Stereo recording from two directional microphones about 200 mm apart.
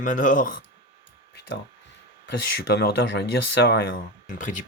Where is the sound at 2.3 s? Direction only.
60° left (ahead or behind).